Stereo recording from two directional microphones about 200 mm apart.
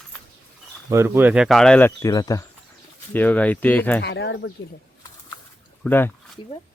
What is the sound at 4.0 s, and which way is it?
Speech, 60° left (ahead or behind).